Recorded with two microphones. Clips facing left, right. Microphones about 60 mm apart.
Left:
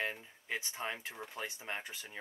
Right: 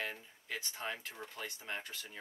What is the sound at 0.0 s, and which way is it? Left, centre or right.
Speech, left.